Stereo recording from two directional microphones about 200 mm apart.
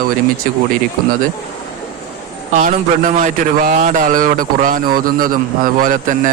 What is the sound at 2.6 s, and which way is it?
A man's voice, 40° right (ahead or behind).